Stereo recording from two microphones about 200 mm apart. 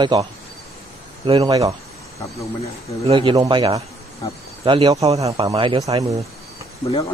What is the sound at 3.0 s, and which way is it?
Speech, 25° right (ahead or behind).